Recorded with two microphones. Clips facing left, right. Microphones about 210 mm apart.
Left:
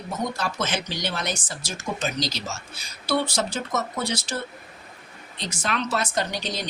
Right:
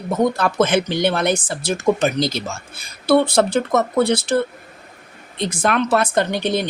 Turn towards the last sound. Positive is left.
turn(degrees=-60)  # may be behind; listen again after turning